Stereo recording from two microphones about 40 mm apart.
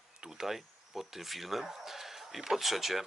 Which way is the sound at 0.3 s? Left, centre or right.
Centre.